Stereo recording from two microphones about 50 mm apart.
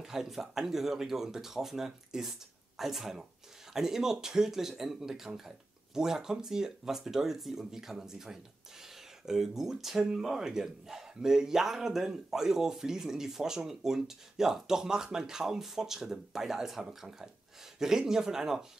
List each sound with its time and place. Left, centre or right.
0.0 s speech: centre